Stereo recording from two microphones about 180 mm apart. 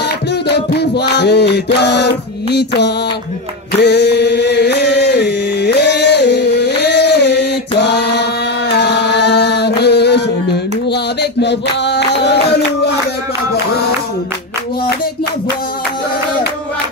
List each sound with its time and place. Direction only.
0.5 s music: 65° left (ahead or behind)
3.8 s chant: 70° left (ahead or behind)
10.9 s a sound: 70° left (ahead or behind)